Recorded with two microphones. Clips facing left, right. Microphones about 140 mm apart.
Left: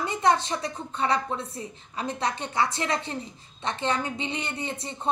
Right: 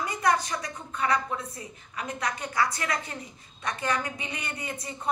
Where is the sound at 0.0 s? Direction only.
25° left (ahead or behind).